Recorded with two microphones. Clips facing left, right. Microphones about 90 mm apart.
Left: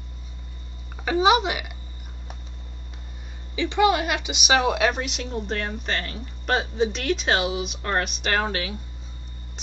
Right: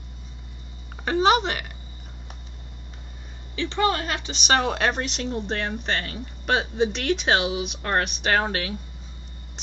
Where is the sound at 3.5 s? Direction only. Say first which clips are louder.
Left 3 dB; 15° left (ahead or behind).